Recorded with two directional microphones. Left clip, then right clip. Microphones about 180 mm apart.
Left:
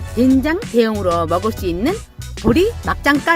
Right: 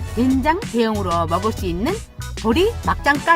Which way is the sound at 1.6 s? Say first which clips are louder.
Left 3 dB; 35° left (ahead or behind).